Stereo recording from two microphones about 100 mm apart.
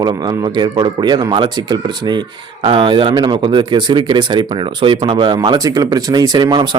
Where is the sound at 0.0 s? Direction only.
45° right (ahead or behind).